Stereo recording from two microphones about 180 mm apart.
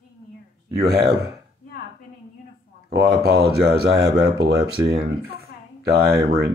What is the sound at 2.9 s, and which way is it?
Speech, 65° right (ahead or behind).